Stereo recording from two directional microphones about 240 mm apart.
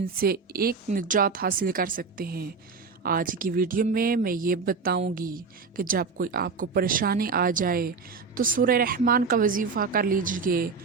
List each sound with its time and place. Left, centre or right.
0.0 s speech: right